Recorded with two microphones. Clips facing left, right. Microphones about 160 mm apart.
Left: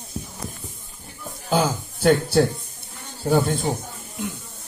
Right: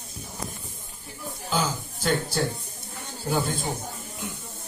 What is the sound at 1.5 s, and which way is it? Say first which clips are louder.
A man's voice: left 6 dB; 55° left (ahead or behind).